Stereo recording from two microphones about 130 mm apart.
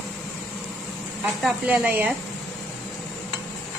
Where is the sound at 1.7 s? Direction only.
10° right (ahead or behind).